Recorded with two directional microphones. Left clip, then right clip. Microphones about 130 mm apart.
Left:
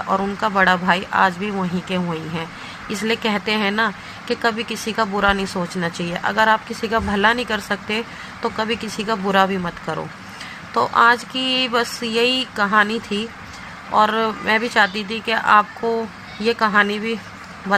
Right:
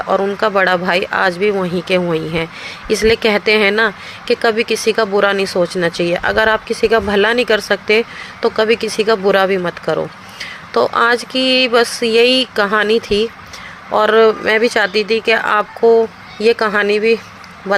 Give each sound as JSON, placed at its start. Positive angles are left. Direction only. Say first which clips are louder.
{"t": 0.1, "sound": "speech", "louder": "right 6 dB", "side_deg": -45}